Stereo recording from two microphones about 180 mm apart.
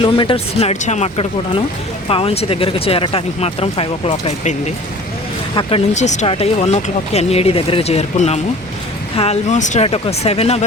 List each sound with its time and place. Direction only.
0.0 s speech: 30° left (ahead or behind)
5.9 s speech: 40° left (ahead or behind)